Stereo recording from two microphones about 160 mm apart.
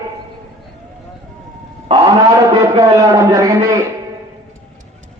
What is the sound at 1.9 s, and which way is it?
Speech, 35° right (ahead or behind).